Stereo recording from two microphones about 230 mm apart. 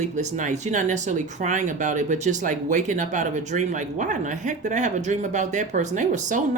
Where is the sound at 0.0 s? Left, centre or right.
Right.